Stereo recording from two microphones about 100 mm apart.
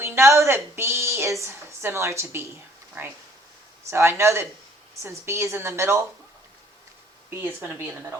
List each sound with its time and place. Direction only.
0.0 s a woman's voice: 25° right (ahead or behind)
7.3 s a woman's voice: 20° right (ahead or behind)